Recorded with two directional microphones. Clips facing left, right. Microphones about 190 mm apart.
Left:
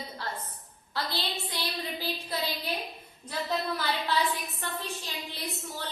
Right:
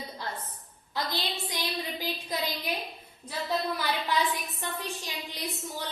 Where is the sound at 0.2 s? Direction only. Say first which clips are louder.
Even; 15° right (ahead or behind).